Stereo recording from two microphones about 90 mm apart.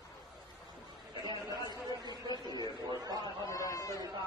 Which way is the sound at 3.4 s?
40° left (ahead or behind).